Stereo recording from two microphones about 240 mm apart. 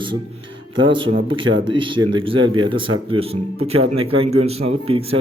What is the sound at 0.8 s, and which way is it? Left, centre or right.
A man's voice, centre.